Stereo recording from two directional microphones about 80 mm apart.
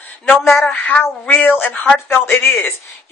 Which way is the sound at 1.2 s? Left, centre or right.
Centre.